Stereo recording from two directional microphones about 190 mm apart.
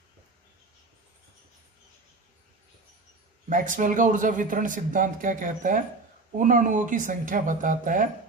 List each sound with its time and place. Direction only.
3.4 s speech: 45° right (ahead or behind)